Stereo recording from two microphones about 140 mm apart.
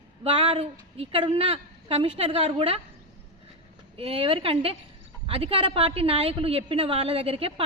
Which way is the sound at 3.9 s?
45° right (ahead or behind).